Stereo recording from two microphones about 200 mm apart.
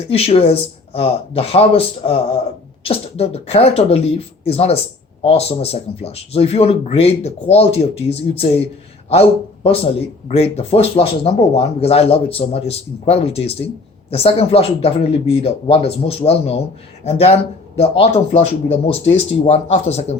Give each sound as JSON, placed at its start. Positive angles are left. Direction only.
{"t": 0.1, "sound": "speech", "side_deg": 30}
{"t": 9.6, "sound": "speech", "side_deg": 30}